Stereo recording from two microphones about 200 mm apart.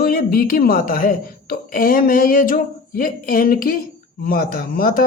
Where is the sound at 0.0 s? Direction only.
50° left (ahead or behind).